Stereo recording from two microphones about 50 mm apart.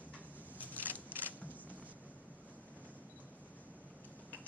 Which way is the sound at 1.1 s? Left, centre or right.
Right.